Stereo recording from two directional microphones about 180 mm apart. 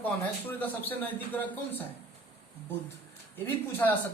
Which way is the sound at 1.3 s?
10° left (ahead or behind).